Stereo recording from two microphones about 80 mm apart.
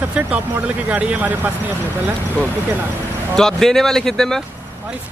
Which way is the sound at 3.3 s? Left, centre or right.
Centre.